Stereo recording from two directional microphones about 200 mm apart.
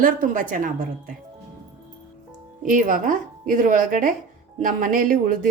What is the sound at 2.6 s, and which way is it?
A woman's voice, 40° right (ahead or behind).